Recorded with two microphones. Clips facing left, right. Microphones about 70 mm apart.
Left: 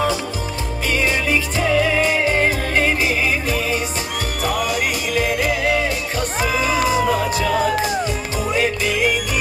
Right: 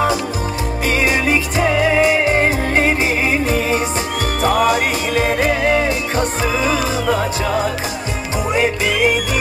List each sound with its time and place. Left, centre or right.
1.0 s music: right